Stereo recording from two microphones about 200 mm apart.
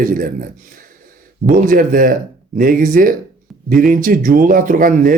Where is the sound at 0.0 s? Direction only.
45° right (ahead or behind).